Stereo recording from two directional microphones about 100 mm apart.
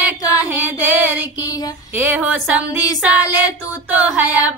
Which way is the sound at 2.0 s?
15° right (ahead or behind).